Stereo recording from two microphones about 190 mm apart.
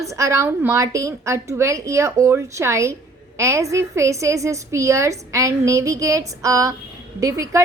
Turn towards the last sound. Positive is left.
turn(degrees=-15)  # may be behind; listen again after turning